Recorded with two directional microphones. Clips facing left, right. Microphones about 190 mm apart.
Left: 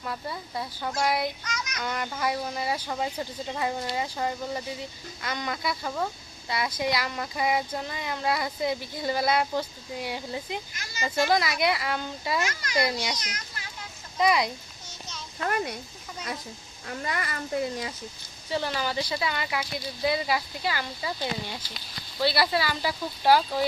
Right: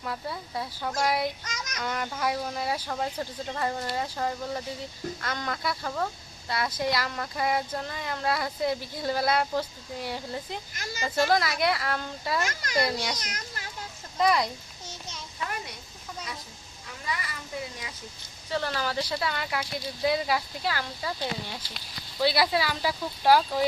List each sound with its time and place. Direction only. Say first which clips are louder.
0.0 s speech: even; centre (ahead or behind)
1.5 s child singing: left 3 dB; 45° right (ahead or behind)
1.8 s speech: even; centre (ahead or behind)
13.2 s children playing: right 1 dB; 50° right (ahead or behind)
14.2 s speech: left 1 dB; centre (ahead or behind)
16.8 s a child's voice: left 4 dB; 60° left (ahead or behind)
18.5 s speech: left 1 dB; centre (ahead or behind)